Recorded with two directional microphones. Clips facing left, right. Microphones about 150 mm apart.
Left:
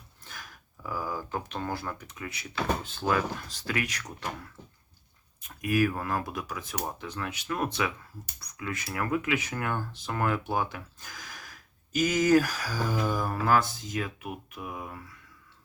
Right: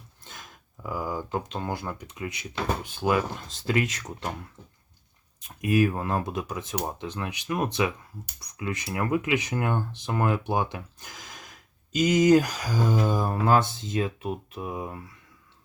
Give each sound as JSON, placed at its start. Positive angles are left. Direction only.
{"t": 0.3, "sound": "speech", "side_deg": -20}
{"t": 5.4, "sound": "speech", "side_deg": -20}